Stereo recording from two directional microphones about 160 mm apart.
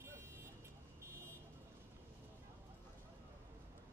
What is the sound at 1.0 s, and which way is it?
Vehicle, 15° right (ahead or behind).